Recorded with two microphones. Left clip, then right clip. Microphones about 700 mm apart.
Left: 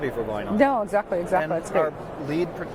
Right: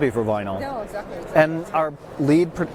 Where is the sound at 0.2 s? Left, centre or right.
Right.